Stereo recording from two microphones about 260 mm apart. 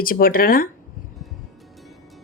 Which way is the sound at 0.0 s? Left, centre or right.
Left.